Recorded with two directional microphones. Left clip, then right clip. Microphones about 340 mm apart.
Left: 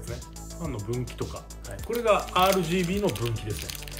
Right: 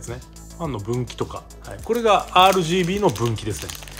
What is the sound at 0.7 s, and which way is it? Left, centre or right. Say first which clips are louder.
Speech: right 7 dB; centre.